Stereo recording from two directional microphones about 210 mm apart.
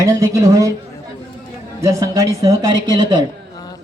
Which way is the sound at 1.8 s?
15° right (ahead or behind).